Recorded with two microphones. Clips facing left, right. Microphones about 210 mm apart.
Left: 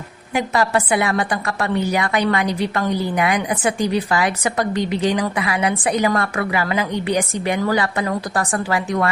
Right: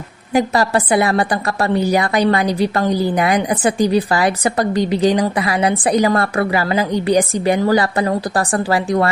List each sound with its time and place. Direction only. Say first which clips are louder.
0.3 s a woman's voice: right 3 dB; 35° right (ahead or behind)